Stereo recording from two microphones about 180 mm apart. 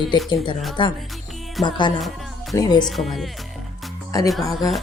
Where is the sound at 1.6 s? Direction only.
Centre (ahead or behind).